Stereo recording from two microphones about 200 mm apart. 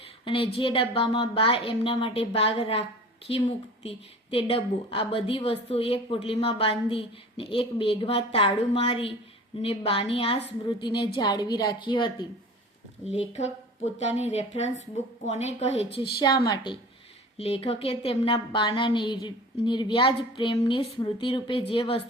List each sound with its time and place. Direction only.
0.3 s a woman's voice: 25° left (ahead or behind)
3.8 s a woman's voice: 30° left (ahead or behind)
13.1 s a woman's voice: 35° left (ahead or behind)
16.2 s a woman's voice: 20° left (ahead or behind)